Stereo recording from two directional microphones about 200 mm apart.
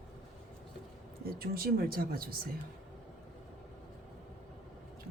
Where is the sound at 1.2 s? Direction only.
50° right (ahead or behind).